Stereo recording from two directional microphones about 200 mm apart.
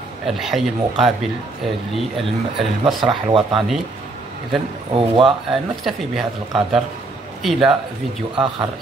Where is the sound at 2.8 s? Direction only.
25° right (ahead or behind).